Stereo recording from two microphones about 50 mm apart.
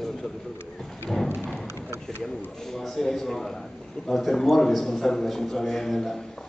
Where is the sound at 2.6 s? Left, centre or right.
Centre.